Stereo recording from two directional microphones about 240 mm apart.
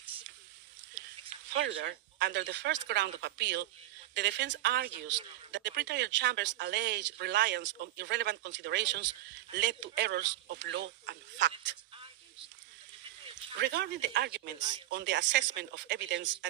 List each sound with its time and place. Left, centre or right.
1.5 s speech: right
13.6 s speech: right